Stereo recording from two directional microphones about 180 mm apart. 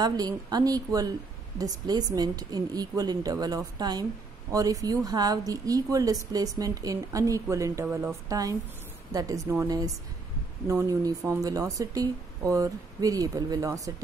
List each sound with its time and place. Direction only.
0.0 s speech: 20° right (ahead or behind)